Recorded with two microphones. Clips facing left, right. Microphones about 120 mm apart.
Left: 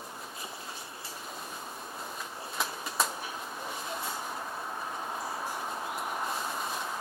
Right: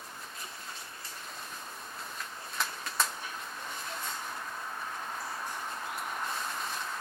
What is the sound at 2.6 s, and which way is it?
Bird, 5° left (ahead or behind).